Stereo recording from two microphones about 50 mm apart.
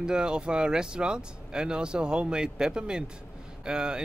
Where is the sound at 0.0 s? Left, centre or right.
Centre.